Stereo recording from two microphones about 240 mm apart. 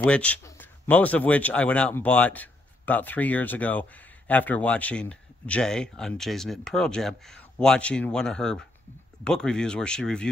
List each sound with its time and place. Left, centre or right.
0.0 s speech: centre